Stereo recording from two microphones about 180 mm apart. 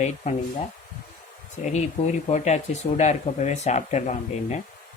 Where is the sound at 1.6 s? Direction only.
40° left (ahead or behind).